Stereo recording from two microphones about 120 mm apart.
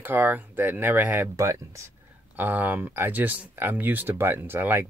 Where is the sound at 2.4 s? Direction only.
15° right (ahead or behind).